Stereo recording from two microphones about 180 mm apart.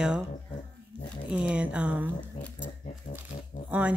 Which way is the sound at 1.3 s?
5° right (ahead or behind).